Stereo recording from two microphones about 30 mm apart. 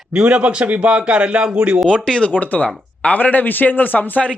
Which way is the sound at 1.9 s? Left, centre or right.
Left.